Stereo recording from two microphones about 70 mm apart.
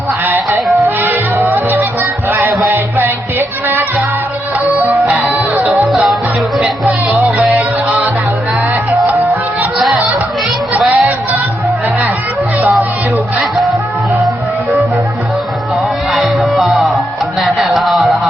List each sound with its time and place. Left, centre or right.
0.3 s music: right
6.8 s music: right
10.8 s music: right
16.1 s music: centre